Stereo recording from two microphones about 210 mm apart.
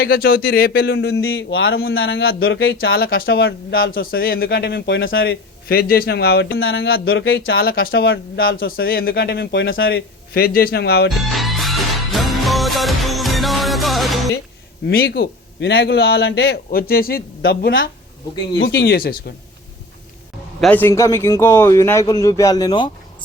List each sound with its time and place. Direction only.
0.0 s a man's voice: 45° left (ahead or behind)
1.4 s speech: 70° left (ahead or behind)
2.9 s a man's voice: 45° left (ahead or behind)
6.6 s speech: 70° left (ahead or behind)
7.6 s a man's voice: 45° left (ahead or behind); by 9.9 s 65° left (ahead or behind)
9.9 s a man's voice: 45° left (ahead or behind)
11.1 s music: centre (ahead or behind)
14.8 s a man's voice: 45° left (ahead or behind)
20.6 s speech: 5° left (ahead or behind)